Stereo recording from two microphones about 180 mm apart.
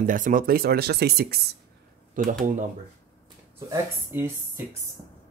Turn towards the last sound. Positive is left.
turn(degrees=-15)  # may be behind; listen again after turning